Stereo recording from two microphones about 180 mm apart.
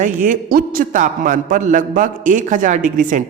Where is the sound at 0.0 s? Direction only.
45° right (ahead or behind).